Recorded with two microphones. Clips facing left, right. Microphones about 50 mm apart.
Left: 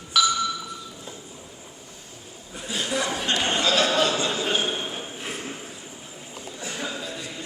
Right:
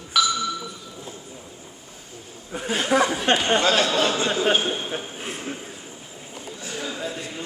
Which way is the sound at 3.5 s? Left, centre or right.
Right.